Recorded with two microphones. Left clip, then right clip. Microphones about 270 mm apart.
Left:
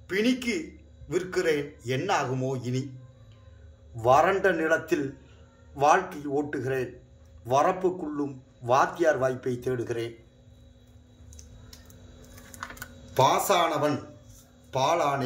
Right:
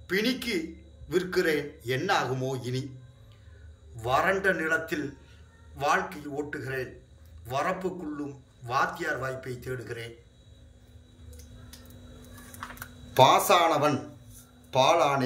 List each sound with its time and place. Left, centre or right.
0.0 s speech: centre
3.9 s a man's voice: left
12.7 s speech: centre